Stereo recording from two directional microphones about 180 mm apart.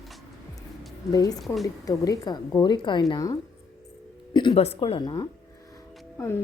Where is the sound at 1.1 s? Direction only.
20° left (ahead or behind).